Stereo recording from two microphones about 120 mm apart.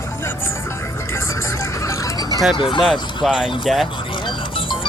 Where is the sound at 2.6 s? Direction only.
45° left (ahead or behind).